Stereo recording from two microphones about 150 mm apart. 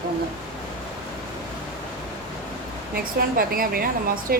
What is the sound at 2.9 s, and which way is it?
A woman's voice, 80° right.